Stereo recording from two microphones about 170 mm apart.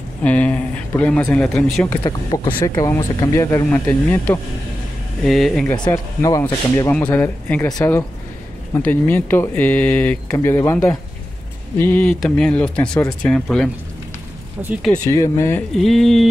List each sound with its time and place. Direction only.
0.2 s a man's voice: 10° left (ahead or behind)
2.0 s speech: 20° left (ahead or behind)
5.2 s speech: centre (ahead or behind)
5.7 s speech: 15° left (ahead or behind)
6.9 s speech: 10° left (ahead or behind)
7.6 s speech: 20° left (ahead or behind)
8.7 s speech: 10° left (ahead or behind)
15.0 s speech: 20° left (ahead or behind)
15.8 s speech: centre (ahead or behind)